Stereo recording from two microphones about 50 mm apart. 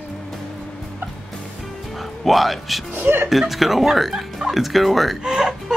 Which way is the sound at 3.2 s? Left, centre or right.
Centre.